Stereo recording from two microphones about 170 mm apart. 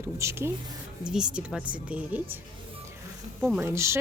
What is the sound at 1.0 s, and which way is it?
Speech, 5° right (ahead or behind).